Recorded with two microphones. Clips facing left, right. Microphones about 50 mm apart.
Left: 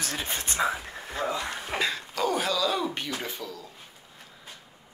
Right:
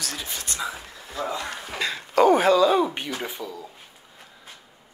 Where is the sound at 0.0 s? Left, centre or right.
Left.